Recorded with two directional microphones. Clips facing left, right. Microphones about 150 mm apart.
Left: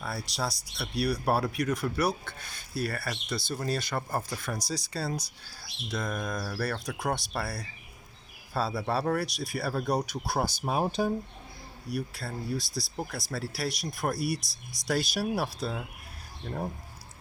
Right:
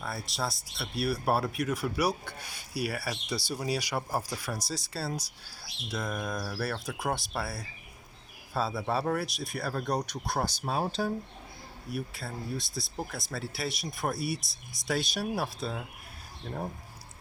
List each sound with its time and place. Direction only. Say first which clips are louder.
0.0 s speech: left 1 dB; centre (ahead or behind); by 11.1 s 15° left (ahead or behind)
11.9 s speech: left 2 dB; centre (ahead or behind)